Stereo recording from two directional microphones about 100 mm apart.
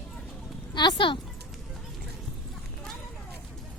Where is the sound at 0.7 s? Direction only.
45° left (ahead or behind).